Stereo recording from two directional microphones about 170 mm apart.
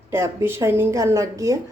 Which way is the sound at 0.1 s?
15° right (ahead or behind).